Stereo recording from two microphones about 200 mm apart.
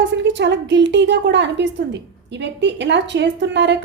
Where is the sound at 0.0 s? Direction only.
65° right (ahead or behind).